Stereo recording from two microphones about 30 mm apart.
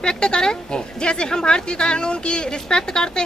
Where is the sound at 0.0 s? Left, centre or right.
Left.